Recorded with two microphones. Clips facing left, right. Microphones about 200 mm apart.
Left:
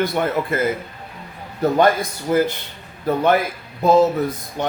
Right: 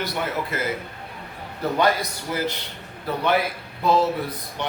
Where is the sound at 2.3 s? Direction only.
45° left (ahead or behind).